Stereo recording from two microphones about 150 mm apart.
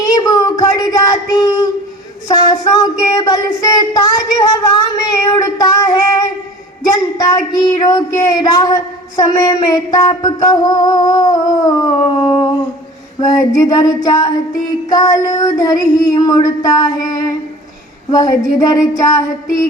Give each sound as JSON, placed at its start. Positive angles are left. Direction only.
{"t": 0.0, "sound": "child singing", "side_deg": 25}
{"t": 2.2, "sound": "speech", "side_deg": 25}
{"t": 6.9, "sound": "speech", "side_deg": 25}
{"t": 12.2, "sound": "a sound", "side_deg": 30}
{"t": 13.6, "sound": "speech", "side_deg": 25}